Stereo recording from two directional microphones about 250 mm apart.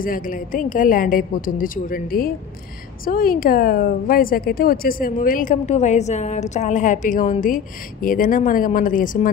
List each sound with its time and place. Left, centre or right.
0.0 s a woman's voice: left